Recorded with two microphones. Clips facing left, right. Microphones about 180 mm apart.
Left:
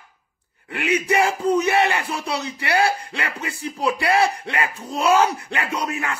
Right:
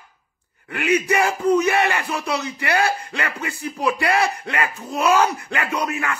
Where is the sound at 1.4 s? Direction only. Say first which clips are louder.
Right 1 dB; 30° left (ahead or behind).